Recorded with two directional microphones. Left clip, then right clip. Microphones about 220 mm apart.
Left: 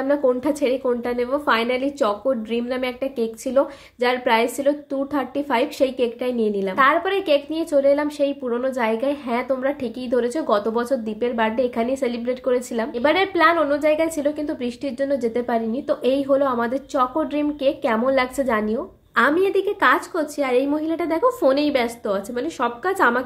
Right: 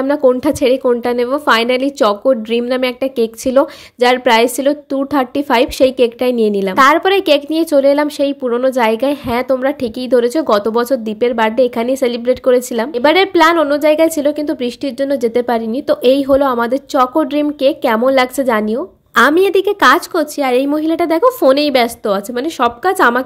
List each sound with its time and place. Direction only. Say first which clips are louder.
0.0 s a woman's voice: right 7 dB; 40° right (ahead or behind)